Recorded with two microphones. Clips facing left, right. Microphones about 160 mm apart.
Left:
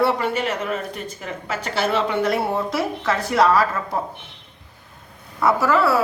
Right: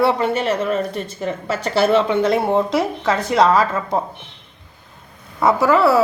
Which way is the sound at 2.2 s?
20° right (ahead or behind).